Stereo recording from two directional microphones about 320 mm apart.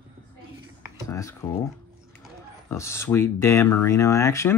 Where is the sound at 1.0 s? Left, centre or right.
Centre.